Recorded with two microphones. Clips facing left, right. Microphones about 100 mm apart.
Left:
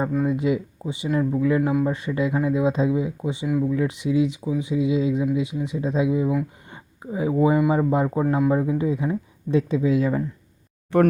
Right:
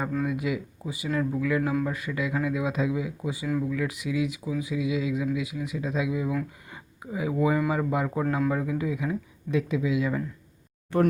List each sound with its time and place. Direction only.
0.1 s speech: 25° left (ahead or behind)
6.7 s a sound: 30° left (ahead or behind)
7.7 s speech: 30° left (ahead or behind)